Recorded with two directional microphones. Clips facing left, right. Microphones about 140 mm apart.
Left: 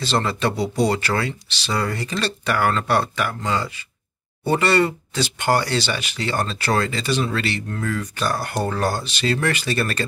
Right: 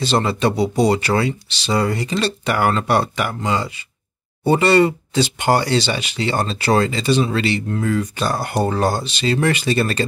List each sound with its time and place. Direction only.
0.0 s speech: 15° right (ahead or behind)